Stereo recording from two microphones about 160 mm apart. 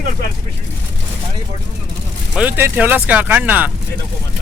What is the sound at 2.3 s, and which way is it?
Speech, 10° right (ahead or behind).